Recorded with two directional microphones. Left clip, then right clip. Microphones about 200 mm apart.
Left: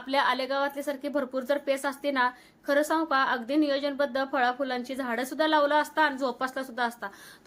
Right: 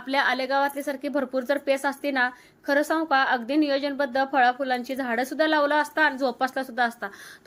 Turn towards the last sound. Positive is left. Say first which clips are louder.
# right 5 dB
turn(degrees=-15)  # may be behind; listen again after turning